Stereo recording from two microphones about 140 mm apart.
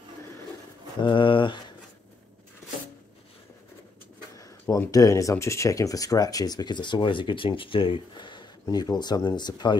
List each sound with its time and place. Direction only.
1.0 s speech: 35° left (ahead or behind)
4.4 s speech: 25° left (ahead or behind)